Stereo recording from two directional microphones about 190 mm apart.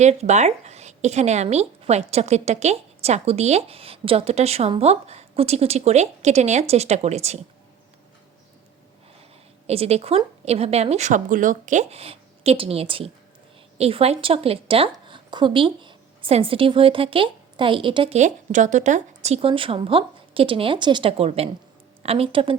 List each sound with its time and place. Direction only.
0.0 s a woman's voice: 35° right (ahead or behind)
9.6 s a woman's voice: 35° right (ahead or behind)